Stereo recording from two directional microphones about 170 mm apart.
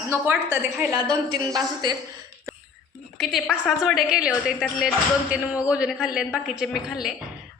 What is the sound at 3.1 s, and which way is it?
A woman's voice, centre (ahead or behind).